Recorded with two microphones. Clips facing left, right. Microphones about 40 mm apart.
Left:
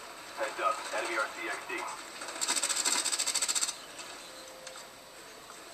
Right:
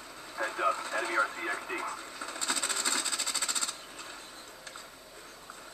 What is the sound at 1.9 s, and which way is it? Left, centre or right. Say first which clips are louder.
Sewing machine: right 2 dB; right.